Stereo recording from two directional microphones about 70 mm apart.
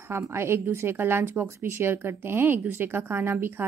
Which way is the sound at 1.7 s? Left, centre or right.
Right.